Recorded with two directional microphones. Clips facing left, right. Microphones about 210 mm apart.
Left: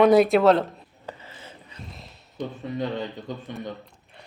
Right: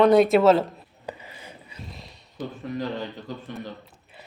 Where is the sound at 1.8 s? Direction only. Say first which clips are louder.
Right 1 dB; centre (ahead or behind).